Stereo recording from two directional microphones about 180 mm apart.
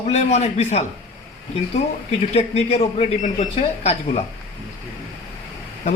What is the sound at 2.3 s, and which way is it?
Speech, 35° left (ahead or behind).